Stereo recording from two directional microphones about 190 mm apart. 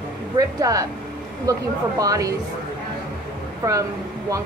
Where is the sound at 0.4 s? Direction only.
20° right (ahead or behind).